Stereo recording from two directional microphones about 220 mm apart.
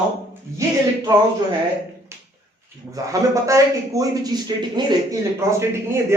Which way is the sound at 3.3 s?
15° right (ahead or behind).